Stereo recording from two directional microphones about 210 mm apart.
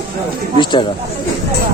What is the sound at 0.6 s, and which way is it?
Speech, 20° left (ahead or behind).